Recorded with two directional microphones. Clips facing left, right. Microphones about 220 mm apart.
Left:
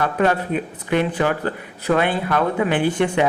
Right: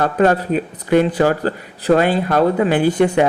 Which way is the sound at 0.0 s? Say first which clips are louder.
Right 4 dB; 40° right (ahead or behind).